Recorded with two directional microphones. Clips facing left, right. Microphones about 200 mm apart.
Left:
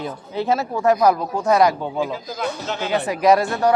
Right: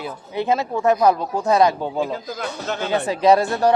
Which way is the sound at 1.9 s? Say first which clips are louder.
Even; 45° right (ahead or behind).